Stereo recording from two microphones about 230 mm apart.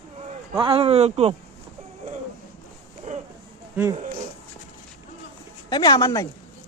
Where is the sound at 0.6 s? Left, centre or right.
Right.